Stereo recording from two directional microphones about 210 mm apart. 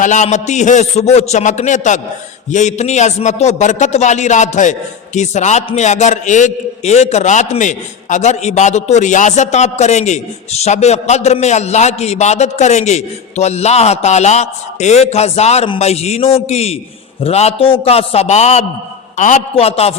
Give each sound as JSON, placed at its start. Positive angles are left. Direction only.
{"t": 0.0, "sound": "a man's voice", "side_deg": 35}